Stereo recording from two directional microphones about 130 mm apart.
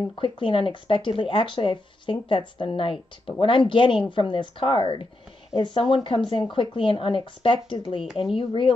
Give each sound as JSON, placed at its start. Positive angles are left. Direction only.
{"t": 0.1, "sound": "speech", "side_deg": 40}